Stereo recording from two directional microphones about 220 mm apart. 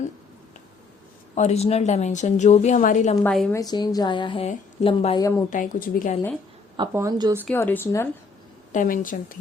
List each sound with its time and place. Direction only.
1.4 s a woman's voice: 30° left (ahead or behind)
3.2 s a woman's voice: 5° left (ahead or behind)
3.5 s a woman's voice: 15° left (ahead or behind)
5.5 s a woman's voice: 40° left (ahead or behind)
6.7 s speech: 15° right (ahead or behind)
7.4 s speech: 10° left (ahead or behind)
8.7 s a woman's voice: 35° left (ahead or behind)